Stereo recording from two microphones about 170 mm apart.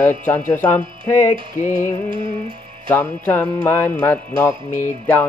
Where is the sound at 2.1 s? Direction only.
30° right (ahead or behind).